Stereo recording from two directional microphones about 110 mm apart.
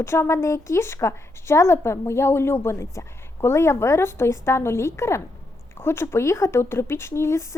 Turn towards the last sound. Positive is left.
turn(degrees=25)  # may be behind; listen again after turning